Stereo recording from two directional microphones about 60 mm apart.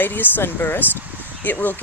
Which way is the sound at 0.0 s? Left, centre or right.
Left.